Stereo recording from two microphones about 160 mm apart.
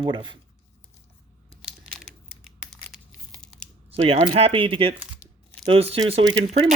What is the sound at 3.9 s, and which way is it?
Speech, 40° right (ahead or behind).